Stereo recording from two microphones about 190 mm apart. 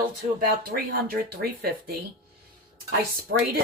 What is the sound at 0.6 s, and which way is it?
A woman's voice, 50° right (ahead or behind).